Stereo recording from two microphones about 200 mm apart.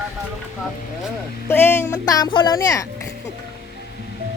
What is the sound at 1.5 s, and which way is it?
Speech, 10° left (ahead or behind).